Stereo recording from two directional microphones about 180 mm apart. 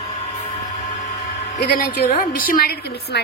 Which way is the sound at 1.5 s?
55° left (ahead or behind).